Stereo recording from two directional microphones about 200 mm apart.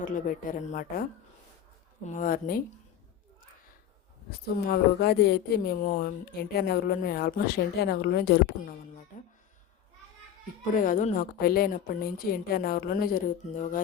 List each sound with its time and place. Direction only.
0.1 s speech: 40° left (ahead or behind)
2.0 s a woman's voice: 40° left (ahead or behind)
4.3 s a woman's voice: 50° left (ahead or behind)
9.1 s speech: 40° left (ahead or behind)
10.8 s a woman's voice: 40° left (ahead or behind)